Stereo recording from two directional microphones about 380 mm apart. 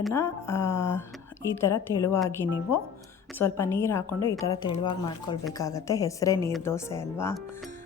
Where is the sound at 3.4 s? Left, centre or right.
Centre.